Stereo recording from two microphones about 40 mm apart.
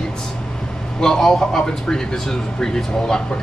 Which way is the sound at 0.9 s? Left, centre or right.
Centre.